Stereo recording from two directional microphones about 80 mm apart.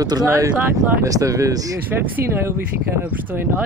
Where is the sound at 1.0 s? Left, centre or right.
Right.